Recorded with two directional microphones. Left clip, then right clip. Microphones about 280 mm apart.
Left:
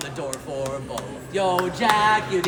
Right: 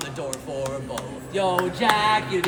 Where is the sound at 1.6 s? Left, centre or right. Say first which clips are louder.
Left 1 dB; centre.